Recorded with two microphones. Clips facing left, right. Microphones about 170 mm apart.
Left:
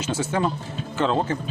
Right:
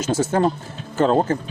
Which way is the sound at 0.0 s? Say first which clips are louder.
Right 5 dB; 40° right (ahead or behind).